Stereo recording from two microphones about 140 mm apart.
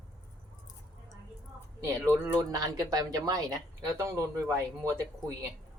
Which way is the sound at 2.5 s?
25° right (ahead or behind).